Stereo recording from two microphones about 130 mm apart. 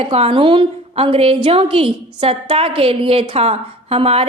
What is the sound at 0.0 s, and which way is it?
A woman's voice, 50° right (ahead or behind).